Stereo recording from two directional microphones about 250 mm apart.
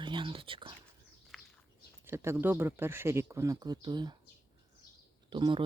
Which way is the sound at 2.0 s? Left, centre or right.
Centre.